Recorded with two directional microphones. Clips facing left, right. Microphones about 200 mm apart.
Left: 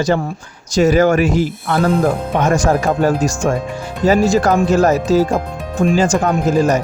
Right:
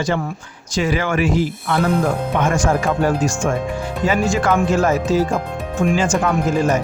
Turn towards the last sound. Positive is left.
turn(degrees=40)  # may be behind; listen again after turning